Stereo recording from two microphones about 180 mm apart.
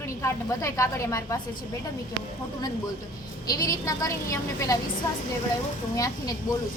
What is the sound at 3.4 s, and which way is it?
A woman's voice, 20° left (ahead or behind).